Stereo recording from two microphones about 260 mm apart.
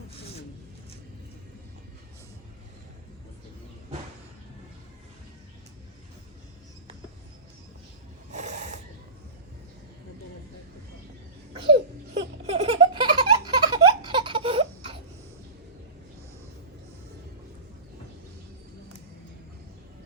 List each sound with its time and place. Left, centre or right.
8.3 s pulleys: right
11.5 s a sound: centre
12.5 s baby laughter: right